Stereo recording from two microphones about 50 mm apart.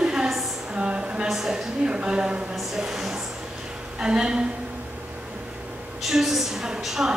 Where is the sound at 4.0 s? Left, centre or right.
Centre.